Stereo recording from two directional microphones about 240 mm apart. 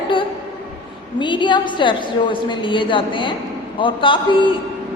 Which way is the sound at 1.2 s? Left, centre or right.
Centre.